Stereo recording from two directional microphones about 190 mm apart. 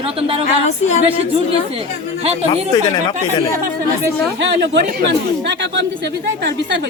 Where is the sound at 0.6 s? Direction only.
35° left (ahead or behind).